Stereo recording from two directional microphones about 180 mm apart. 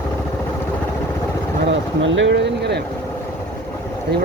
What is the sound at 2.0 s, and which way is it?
Speech, 90° right.